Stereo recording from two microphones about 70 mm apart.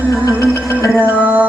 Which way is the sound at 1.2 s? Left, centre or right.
Right.